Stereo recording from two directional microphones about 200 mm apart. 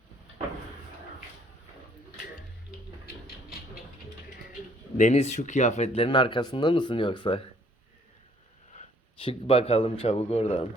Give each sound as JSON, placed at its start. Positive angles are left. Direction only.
{"t": 4.9, "sound": "speech", "side_deg": 35}
{"t": 8.7, "sound": "a sound", "side_deg": 30}
{"t": 10.0, "sound": "speech", "side_deg": 30}